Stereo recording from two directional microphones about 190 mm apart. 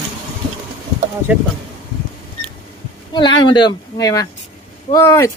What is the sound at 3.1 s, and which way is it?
Speech, 25° left (ahead or behind).